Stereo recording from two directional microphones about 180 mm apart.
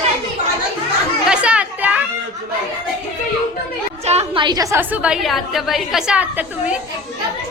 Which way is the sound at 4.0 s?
35° right (ahead or behind).